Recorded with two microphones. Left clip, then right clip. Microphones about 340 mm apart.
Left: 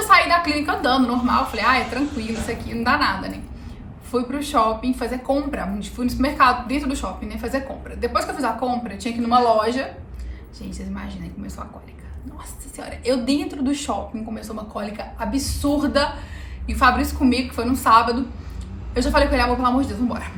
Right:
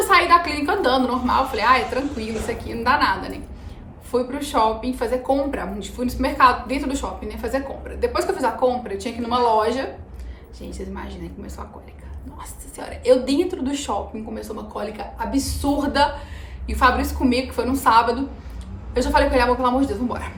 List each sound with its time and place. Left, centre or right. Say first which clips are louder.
0.1 s a woman's voice: left 1 dB; centre
12.4 s a woman's voice: right 2 dB; centre